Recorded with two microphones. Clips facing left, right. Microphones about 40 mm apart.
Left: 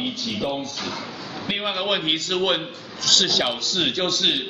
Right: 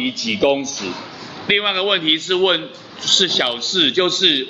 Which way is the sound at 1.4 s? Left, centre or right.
Right.